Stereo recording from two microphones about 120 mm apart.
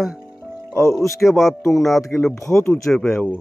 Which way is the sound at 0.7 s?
25° left (ahead or behind).